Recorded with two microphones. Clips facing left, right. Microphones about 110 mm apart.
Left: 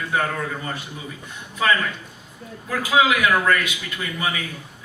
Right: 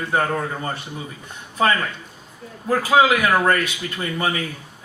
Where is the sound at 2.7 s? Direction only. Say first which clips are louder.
Right 3 dB; 35° right (ahead or behind).